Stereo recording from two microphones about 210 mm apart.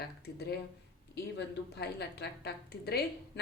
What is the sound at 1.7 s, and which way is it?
Speech, 50° left (ahead or behind).